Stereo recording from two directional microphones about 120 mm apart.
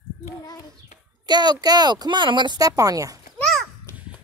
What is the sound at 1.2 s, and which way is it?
A child's voice, 35° right (ahead or behind).